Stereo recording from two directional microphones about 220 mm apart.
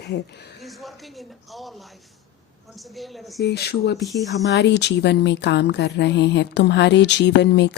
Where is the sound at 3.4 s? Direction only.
50° left (ahead or behind).